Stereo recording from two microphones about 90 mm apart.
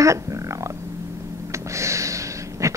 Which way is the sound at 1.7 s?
35° right (ahead or behind).